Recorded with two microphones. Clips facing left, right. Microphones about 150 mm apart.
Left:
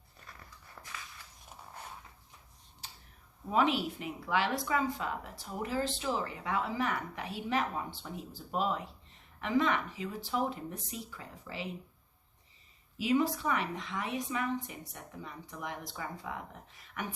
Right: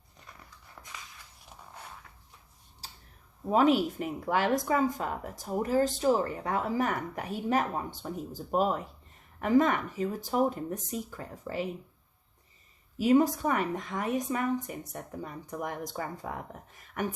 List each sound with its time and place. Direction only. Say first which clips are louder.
2.8 s tick-tock: right 2 dB; 35° right (ahead or behind)
3.5 s speech: right 6 dB; 45° right (ahead or behind)
13.0 s speech: right 6 dB; 45° right (ahead or behind)